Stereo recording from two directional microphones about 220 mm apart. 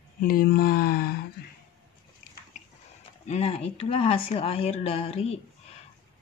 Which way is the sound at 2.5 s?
35° left (ahead or behind).